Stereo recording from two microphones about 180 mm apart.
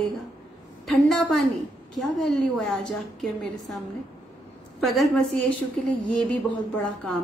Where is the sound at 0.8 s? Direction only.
Centre (ahead or behind).